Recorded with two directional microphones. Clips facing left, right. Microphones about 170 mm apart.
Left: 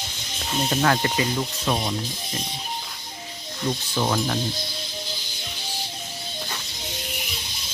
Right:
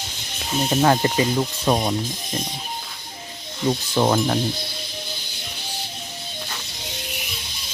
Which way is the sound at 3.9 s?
50° right (ahead or behind).